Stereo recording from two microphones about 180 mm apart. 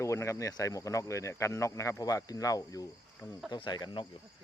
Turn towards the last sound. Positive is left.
turn(degrees=25)  # may be behind; listen again after turning